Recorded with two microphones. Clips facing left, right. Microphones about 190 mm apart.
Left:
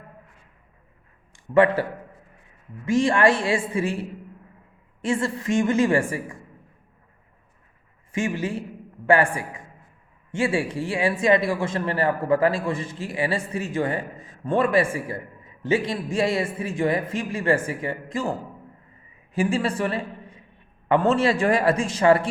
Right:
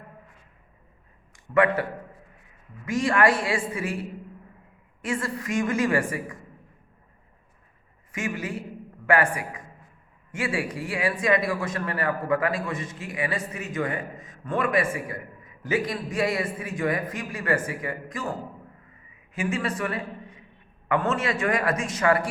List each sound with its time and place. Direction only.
1.3 s a man's voice: 30° left (ahead or behind)
5.0 s a man's voice: 25° left (ahead or behind)
8.1 s a man's voice: 30° left (ahead or behind)